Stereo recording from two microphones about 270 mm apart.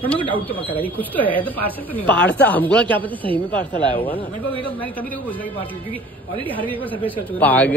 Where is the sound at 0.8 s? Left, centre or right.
Centre.